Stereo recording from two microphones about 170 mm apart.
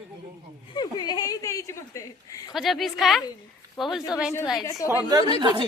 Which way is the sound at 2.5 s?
Centre (ahead or behind).